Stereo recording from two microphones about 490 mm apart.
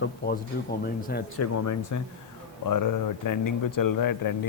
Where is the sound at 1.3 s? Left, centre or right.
Left.